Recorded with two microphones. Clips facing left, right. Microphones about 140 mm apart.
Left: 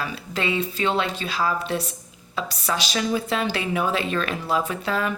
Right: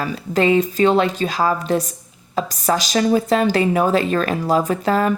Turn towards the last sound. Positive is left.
turn(degrees=-40)  # may be behind; listen again after turning